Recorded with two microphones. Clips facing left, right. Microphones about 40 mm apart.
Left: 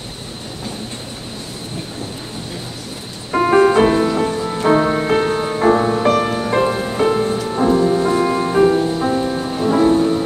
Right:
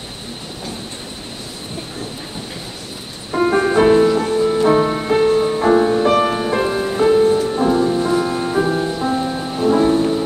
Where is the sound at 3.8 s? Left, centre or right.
Centre.